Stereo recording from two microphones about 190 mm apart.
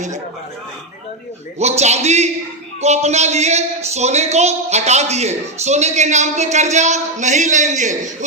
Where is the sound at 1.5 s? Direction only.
35° right (ahead or behind).